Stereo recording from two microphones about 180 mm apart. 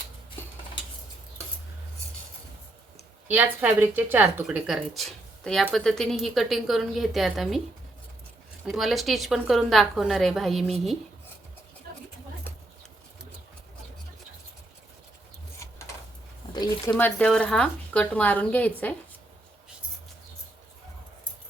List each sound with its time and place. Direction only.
3.2 s a woman's voice: 10° right (ahead or behind)
8.6 s a woman's voice: centre (ahead or behind)
16.5 s speech: 20° left (ahead or behind)
16.9 s speech: 5° left (ahead or behind)